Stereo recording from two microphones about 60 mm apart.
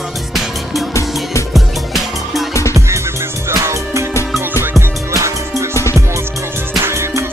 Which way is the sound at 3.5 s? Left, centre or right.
Right.